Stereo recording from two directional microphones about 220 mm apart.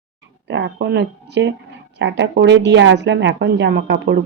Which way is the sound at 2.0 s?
55° right (ahead or behind).